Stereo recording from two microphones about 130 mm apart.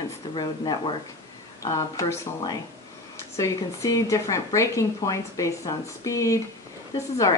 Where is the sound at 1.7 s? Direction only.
25° left (ahead or behind).